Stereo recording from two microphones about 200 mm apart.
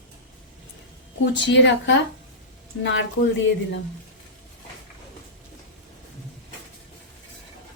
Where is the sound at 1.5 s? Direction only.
60° left (ahead or behind).